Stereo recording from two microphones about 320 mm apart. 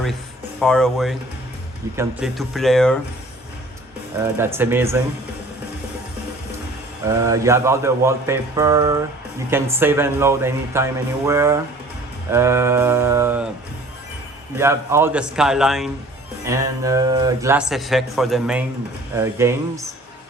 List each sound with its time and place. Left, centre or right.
0.6 s a man's voice: centre
4.2 s speech: centre
7.1 s speech: centre
14.6 s a man's voice: centre